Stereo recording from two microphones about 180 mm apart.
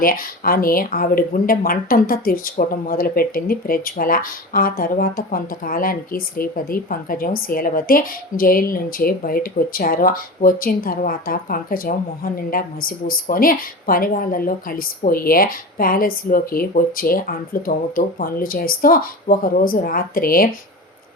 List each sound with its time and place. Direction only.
0.0 s speech: 55° left (ahead or behind)